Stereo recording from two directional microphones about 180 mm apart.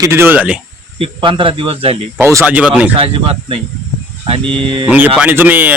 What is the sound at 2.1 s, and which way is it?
Speech, 15° right (ahead or behind).